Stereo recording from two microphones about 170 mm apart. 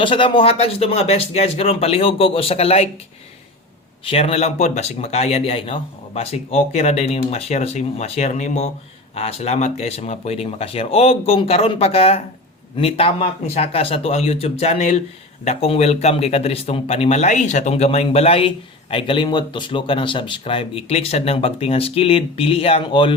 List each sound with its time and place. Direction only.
0.0 s speech: 30° left (ahead or behind)
4.0 s speech: 35° left (ahead or behind)